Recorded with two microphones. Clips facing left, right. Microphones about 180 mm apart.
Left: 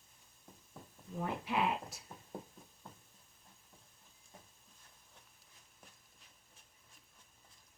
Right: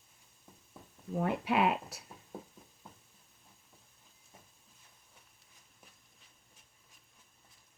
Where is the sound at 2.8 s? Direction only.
5° right (ahead or behind).